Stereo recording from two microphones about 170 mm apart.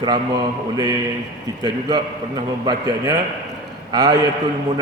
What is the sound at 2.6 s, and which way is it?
A man's voice, 20° right (ahead or behind).